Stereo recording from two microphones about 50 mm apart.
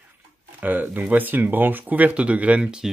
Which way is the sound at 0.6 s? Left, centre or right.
Right.